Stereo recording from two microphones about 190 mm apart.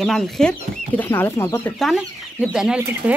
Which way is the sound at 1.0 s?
10° left (ahead or behind).